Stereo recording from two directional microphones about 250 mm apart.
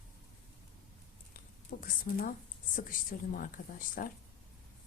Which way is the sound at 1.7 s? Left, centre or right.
Left.